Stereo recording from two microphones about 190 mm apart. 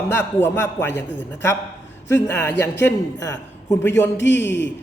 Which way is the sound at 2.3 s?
10° left (ahead or behind).